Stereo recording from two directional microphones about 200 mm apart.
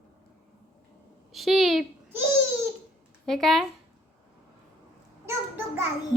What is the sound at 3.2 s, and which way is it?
Speech, centre (ahead or behind).